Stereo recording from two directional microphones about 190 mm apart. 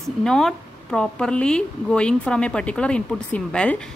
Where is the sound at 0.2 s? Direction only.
5° left (ahead or behind).